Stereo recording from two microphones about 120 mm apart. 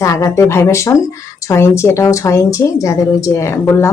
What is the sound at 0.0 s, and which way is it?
A woman's voice, 25° left (ahead or behind).